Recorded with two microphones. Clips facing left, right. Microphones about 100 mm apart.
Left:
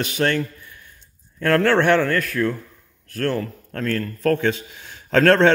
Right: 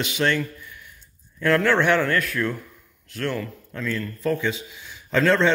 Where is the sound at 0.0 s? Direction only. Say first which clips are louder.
Left 2 dB; 45° left (ahead or behind).